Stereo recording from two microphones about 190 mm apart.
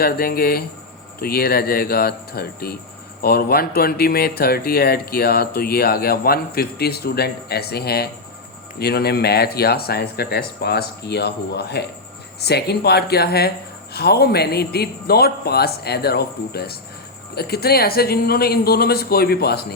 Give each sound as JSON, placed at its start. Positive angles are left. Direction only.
{"t": 0.0, "sound": "speech", "side_deg": 50}